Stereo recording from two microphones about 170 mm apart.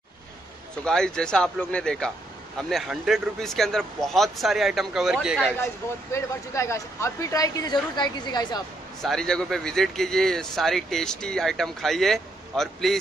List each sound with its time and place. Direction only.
0.8 s speech: 5° left (ahead or behind)
6.1 s a woman's voice: 15° left (ahead or behind)
9.0 s speech: 5° left (ahead or behind)